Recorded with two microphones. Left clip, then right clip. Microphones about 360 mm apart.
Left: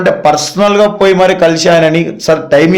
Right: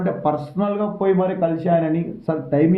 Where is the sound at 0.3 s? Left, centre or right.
Left.